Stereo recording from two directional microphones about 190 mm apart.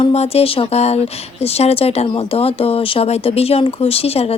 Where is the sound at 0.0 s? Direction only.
35° left (ahead or behind).